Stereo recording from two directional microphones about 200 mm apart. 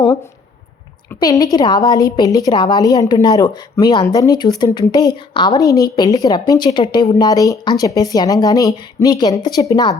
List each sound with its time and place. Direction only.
1.2 s speech: 20° left (ahead or behind)